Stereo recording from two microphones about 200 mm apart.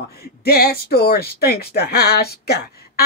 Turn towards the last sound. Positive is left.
turn(degrees=50)  # may be behind; listen again after turning